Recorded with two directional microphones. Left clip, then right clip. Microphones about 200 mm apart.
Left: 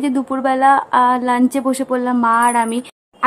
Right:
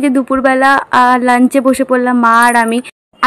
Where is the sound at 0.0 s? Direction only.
20° right (ahead or behind).